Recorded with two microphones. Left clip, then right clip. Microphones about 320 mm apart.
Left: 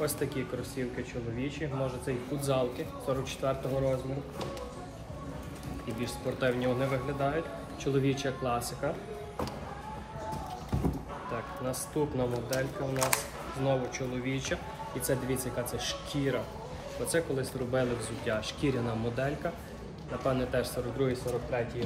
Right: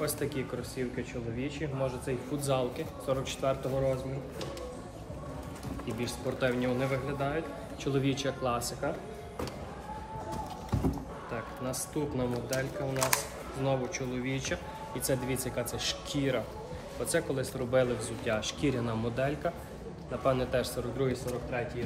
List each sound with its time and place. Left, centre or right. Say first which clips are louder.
0.0 s a man's voice: left 1 dB; centre
5.9 s a man's voice: even; centre
11.6 s a man's voice: left 3 dB; centre